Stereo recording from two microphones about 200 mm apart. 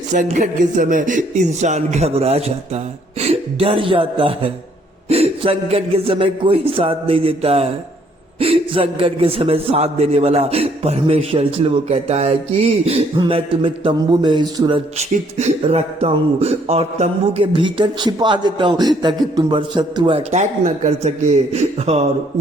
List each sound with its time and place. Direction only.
0.1 s speech: 40° right (ahead or behind); by 14.8 s 20° right (ahead or behind)
14.9 s speech: 35° right (ahead or behind)